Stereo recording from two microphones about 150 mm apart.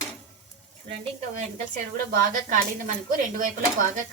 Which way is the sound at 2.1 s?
70° right (ahead or behind).